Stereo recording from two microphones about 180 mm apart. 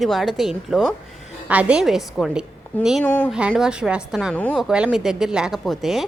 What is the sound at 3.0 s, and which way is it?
Speech, 10° left (ahead or behind).